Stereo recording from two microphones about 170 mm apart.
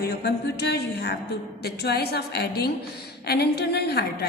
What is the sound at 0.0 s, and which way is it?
A woman's voice, 80° left.